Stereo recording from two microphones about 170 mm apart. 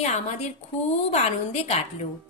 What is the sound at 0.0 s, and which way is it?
A woman's voice, 40° left (ahead or behind).